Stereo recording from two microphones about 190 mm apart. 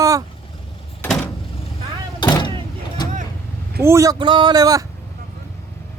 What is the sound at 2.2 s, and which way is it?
Vehicle, 20° left (ahead or behind).